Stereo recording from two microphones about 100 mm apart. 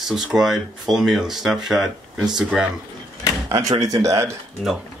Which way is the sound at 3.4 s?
35° right (ahead or behind).